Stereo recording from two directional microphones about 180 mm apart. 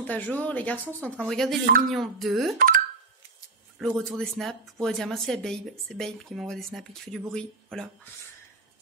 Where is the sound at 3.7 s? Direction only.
Centre (ahead or behind).